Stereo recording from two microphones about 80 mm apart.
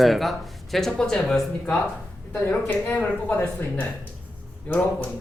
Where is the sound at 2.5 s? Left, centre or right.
Left.